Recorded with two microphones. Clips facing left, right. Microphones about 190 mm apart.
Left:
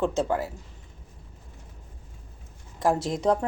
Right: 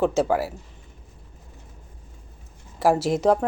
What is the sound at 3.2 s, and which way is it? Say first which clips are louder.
Speech: right 3 dB; 75° right (ahead or behind).